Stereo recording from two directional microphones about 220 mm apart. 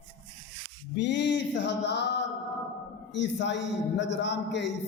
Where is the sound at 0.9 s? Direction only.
55° left (ahead or behind).